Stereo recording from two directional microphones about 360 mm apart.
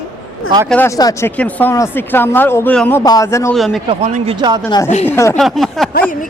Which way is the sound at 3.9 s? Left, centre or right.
Centre.